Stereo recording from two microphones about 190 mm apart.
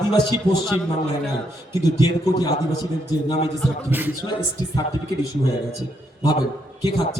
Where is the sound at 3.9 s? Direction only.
10° right (ahead or behind).